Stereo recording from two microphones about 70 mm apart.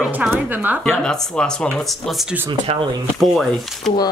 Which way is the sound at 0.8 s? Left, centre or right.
Centre.